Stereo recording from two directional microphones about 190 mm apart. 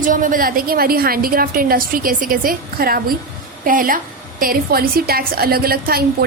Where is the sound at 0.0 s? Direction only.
45° right (ahead or behind).